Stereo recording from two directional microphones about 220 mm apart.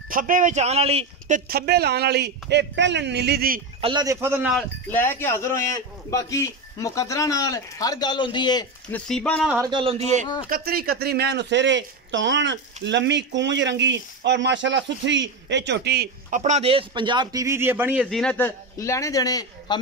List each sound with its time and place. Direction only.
0.1 s speech: 40° right (ahead or behind)
3.8 s a man's voice: 20° right (ahead or behind)
4.6 s speech: 10° left (ahead or behind)
8.9 s speech: 5° left (ahead or behind)
9.7 s speech: 25° right (ahead or behind)
10.5 s speech: 45° right (ahead or behind); by 19.8 s 15° left (ahead or behind)